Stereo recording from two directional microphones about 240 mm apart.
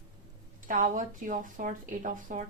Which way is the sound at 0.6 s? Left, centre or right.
Right.